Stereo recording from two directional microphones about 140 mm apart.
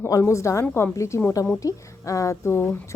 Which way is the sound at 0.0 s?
20° left (ahead or behind).